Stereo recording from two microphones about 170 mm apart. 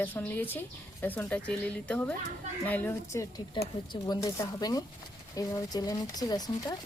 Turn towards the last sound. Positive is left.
turn(degrees=25)  # may be behind; listen again after turning